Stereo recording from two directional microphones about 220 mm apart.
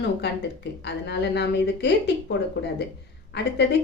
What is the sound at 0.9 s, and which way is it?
A woman's voice, 50° left (ahead or behind).